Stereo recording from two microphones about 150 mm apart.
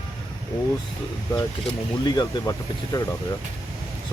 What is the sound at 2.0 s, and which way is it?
Speech, 30° left (ahead or behind).